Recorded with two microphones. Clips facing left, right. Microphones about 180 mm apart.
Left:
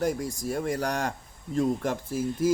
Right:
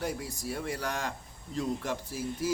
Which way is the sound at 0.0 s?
45° left (ahead or behind).